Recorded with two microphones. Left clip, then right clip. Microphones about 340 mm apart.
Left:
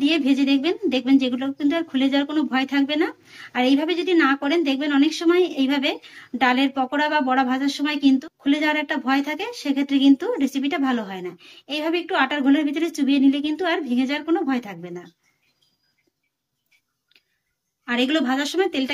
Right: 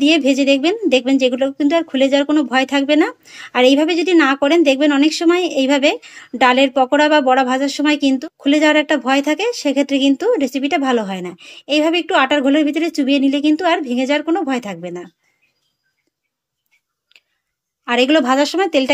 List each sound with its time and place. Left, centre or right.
0.0 s speech: centre
17.8 s speech: centre